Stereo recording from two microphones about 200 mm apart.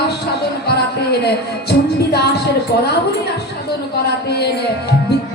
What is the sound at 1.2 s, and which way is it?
Speech, 55° left (ahead or behind).